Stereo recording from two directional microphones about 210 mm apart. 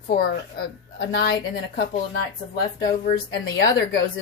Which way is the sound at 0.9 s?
50° left (ahead or behind).